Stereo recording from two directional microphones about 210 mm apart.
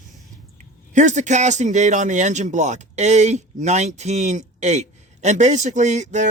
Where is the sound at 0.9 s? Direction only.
35° right (ahead or behind).